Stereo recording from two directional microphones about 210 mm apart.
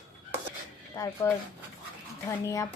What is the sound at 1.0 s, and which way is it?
Speech, 15° left (ahead or behind).